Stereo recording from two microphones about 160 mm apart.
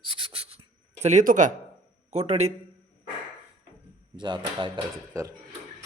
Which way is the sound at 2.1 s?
45° right (ahead or behind).